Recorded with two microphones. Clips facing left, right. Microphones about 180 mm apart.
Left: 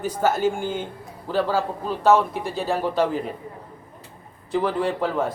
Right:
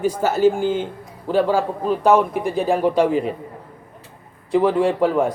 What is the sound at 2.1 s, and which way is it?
Speech, 55° right (ahead or behind).